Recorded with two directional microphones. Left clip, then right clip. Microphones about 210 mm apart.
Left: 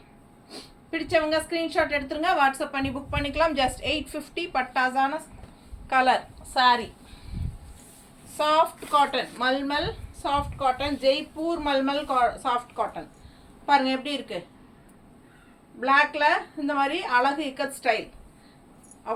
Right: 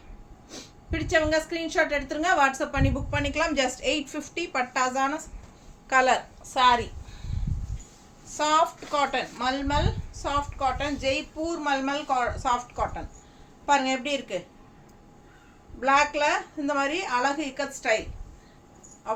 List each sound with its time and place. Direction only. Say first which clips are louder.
0.5 s a woman's voice: left 1 dB; 15° right (ahead or behind)
8.4 s a woman's voice: left 1 dB; 15° right (ahead or behind)
15.8 s a woman's voice: left 1 dB; 10° right (ahead or behind)